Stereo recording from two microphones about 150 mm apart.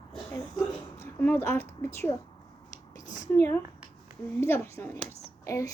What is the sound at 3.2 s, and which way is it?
A woman's voice, 15° left (ahead or behind).